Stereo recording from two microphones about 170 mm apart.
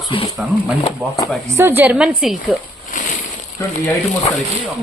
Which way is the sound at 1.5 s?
15° right (ahead or behind).